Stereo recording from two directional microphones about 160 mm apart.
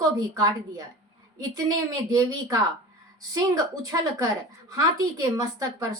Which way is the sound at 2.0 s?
20° right (ahead or behind).